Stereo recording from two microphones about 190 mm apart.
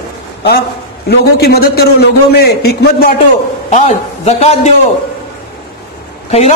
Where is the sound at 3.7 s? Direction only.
35° left (ahead or behind).